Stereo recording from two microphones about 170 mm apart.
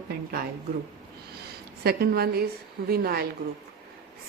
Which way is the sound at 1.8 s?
65° right (ahead or behind).